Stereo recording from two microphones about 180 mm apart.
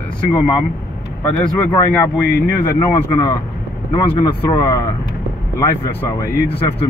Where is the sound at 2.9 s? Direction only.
25° left (ahead or behind).